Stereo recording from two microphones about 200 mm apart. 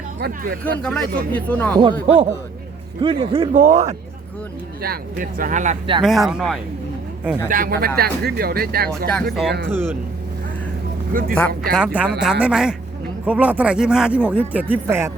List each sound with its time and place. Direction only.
0.2 s speech: 50° right (ahead or behind)
0.6 s a man's voice: 5° left (ahead or behind)
1.8 s a man's voice: 25° right (ahead or behind)
3.5 s speech: 40° right (ahead or behind)
4.8 s speech: 45° right (ahead or behind)
6.0 s speech: centre (ahead or behind)
7.5 s speech: 45° right (ahead or behind)
9.3 s speech: centre (ahead or behind)
11.1 s speech: 45° right (ahead or behind)
11.7 s speech: 5° right (ahead or behind)